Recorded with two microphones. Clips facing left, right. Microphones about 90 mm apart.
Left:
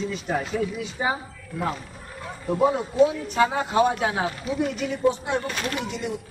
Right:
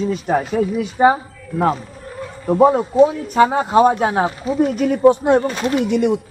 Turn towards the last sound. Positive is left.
turn(degrees=-60)  # may be behind; listen again after turning